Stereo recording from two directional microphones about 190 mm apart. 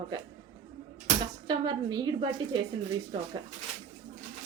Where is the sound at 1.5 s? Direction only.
20° right (ahead or behind).